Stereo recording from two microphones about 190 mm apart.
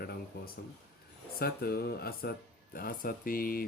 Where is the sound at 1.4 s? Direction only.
55° left (ahead or behind).